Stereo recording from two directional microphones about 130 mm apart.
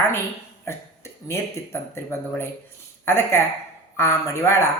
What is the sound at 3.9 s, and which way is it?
Speech, 20° left (ahead or behind).